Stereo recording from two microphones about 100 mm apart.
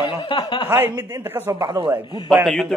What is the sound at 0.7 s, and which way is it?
Speech, 20° right (ahead or behind).